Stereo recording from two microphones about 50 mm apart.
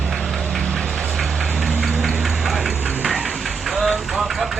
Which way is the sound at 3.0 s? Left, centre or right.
Centre.